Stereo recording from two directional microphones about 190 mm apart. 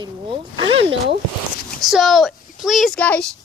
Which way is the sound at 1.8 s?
Centre (ahead or behind).